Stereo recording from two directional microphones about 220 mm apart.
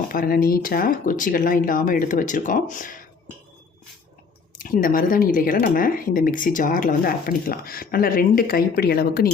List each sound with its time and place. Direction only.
0.1 s speech: 40° left (ahead or behind)
4.6 s speech: 40° left (ahead or behind)